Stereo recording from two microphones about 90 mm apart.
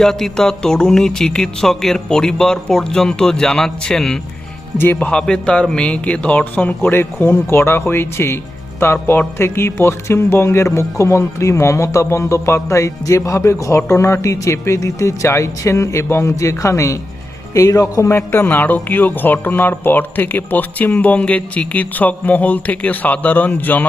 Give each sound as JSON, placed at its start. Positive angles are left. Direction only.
{"t": 0.0, "sound": "speech", "side_deg": 5}
{"t": 4.8, "sound": "speech", "side_deg": 20}
{"t": 18.2, "sound": "speech", "side_deg": 20}